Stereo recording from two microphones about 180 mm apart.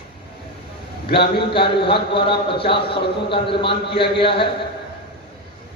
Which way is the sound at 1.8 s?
30° left (ahead or behind).